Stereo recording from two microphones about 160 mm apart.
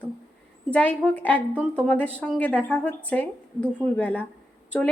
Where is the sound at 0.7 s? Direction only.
10° left (ahead or behind).